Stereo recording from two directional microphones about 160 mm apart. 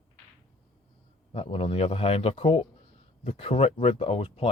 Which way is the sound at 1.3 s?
35° left (ahead or behind).